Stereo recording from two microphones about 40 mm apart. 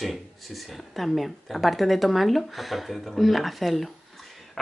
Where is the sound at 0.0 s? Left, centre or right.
Centre.